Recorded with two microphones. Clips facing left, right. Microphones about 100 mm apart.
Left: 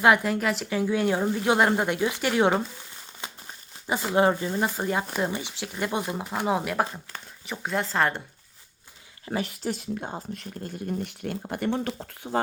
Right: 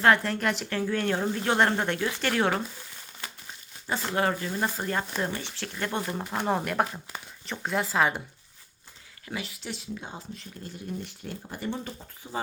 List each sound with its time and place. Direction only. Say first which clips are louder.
0.0 s speech: left 2 dB; 10° left (ahead or behind)
0.8 s speech: left 4 dB; 15° left (ahead or behind)
3.8 s speech: left 5 dB; 15° left (ahead or behind); by 8.2 s 5° right (ahead or behind)
9.4 s speech: left 7 dB; 50° left (ahead or behind); by 12.4 s 80° left